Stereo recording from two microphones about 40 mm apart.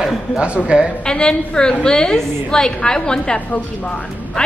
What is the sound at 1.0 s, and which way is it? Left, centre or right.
A woman's voice, left.